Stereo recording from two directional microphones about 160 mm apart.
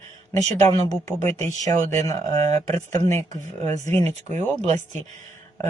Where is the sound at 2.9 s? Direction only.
45° right (ahead or behind).